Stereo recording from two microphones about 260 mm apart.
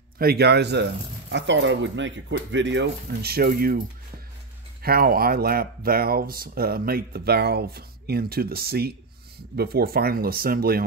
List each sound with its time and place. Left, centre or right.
0.2 s speech: right
4.8 s speech: right